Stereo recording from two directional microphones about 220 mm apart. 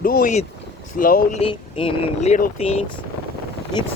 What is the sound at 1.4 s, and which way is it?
Speech, 25° left (ahead or behind).